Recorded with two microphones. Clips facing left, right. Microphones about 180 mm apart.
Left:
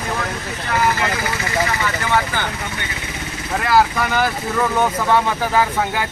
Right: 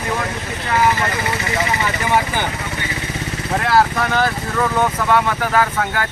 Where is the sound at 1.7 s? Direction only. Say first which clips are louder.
Right 1 dB; 15° right (ahead or behind).